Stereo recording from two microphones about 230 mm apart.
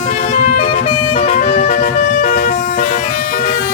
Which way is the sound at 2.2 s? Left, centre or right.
Left.